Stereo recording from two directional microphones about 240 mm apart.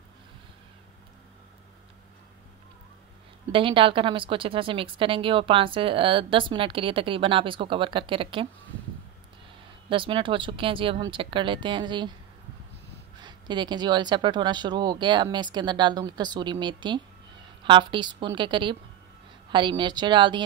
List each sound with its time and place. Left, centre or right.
3.5 s a woman's voice: right
9.8 s a woman's voice: right
13.2 s a woman's voice: centre
19.8 s a woman's voice: centre